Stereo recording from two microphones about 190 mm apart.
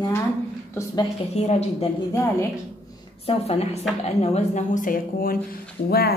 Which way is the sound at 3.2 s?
30° left (ahead or behind).